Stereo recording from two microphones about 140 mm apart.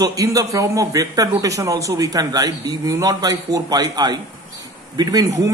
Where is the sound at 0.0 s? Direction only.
25° right (ahead or behind).